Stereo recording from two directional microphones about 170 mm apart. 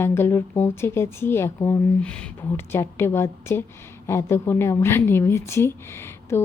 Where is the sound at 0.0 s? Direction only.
15° left (ahead or behind).